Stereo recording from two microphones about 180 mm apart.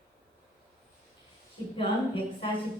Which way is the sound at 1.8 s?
30° left (ahead or behind).